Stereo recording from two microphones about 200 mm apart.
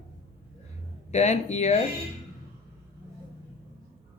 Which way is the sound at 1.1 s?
35° left (ahead or behind).